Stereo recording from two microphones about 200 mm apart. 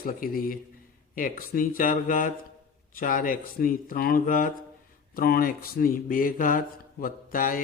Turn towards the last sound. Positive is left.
turn(degrees=45)  # may be behind; listen again after turning